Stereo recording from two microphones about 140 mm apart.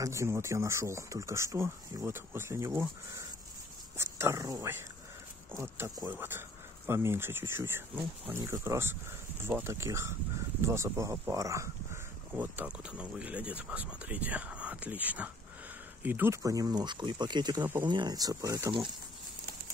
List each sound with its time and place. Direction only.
0.0 s speech: 20° right (ahead or behind)